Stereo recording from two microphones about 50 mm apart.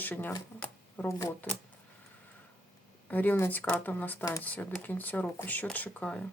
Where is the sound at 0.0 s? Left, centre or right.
Left.